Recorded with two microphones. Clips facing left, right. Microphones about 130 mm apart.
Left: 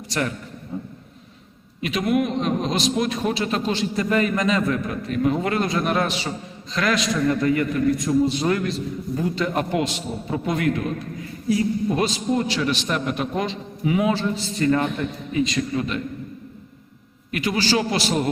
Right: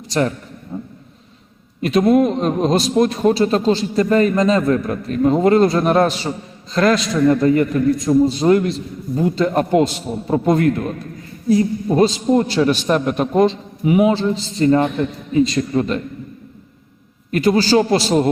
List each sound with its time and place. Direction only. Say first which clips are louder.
0.1 s a man's voice: right 7 dB; 30° right (ahead or behind)
1.8 s a man's voice: right 8 dB; 40° right (ahead or behind)
13.8 s a man's voice: right 6 dB; 25° right (ahead or behind); by 16.0 s 40° right (ahead or behind)
17.3 s a man's voice: right 8 dB; 40° right (ahead or behind)